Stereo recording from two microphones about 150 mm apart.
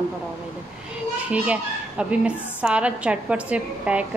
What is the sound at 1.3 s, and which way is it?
A woman's voice, 10° right (ahead or behind).